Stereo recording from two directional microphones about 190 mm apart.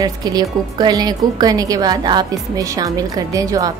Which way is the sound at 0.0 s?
20° right (ahead or behind).